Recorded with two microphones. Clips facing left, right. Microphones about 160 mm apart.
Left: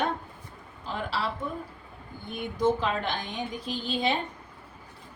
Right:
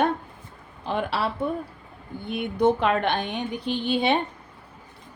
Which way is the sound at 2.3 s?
65° right (ahead or behind).